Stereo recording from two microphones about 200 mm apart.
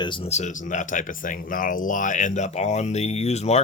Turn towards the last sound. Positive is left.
turn(degrees=35)  # may be behind; listen again after turning